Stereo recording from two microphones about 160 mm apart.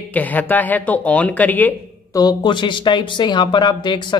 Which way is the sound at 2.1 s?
25° left (ahead or behind).